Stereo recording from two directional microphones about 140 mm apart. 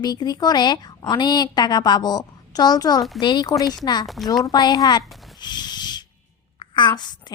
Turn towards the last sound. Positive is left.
turn(degrees=30)  # may be behind; listen again after turning